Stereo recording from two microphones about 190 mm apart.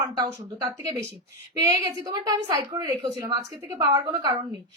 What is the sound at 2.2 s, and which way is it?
A woman's voice, 20° right (ahead or behind).